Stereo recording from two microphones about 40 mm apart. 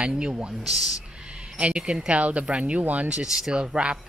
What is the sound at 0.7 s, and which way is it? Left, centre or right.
Speech, centre.